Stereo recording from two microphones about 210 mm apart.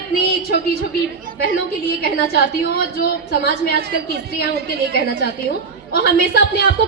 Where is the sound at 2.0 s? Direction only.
45° left (ahead or behind).